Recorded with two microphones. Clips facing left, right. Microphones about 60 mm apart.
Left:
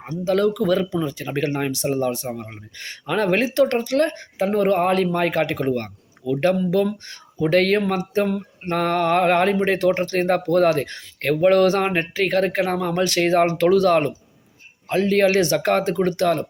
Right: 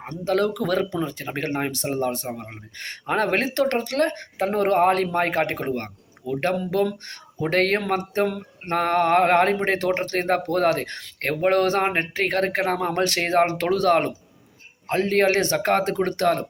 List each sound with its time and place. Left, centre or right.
0.0 s speech: right
0.9 s speech: right
2.2 s speech: right
2.7 s speech: right
6.2 s speech: left
6.7 s speech: right
15.8 s speech: right